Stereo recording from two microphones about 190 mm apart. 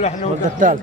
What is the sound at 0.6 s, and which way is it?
Speech, 45° right (ahead or behind).